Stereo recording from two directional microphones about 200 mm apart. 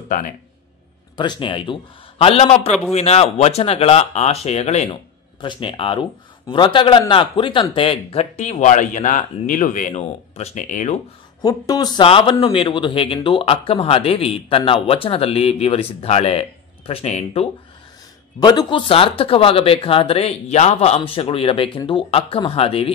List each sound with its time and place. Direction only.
1.1 s a man's voice: 20° left (ahead or behind); by 11.0 s 35° left (ahead or behind)
11.4 s a man's voice: 20° left (ahead or behind)
18.4 s a man's voice: 20° left (ahead or behind)